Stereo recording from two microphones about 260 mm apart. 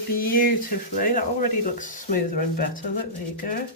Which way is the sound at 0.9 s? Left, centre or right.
Left.